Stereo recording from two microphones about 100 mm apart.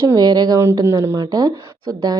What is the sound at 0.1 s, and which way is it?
Speech, 40° right (ahead or behind).